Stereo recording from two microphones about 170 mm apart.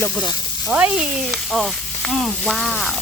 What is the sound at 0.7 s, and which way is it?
Frying, 5° right (ahead or behind).